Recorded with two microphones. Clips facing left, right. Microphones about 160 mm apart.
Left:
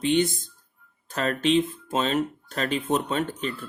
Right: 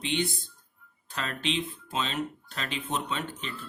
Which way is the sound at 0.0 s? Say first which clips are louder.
Left 8 dB; 45° left (ahead or behind).